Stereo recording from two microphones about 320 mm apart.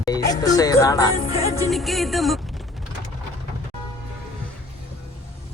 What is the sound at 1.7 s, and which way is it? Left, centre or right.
Music, centre.